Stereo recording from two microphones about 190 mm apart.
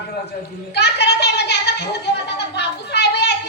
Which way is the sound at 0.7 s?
60° left (ahead or behind).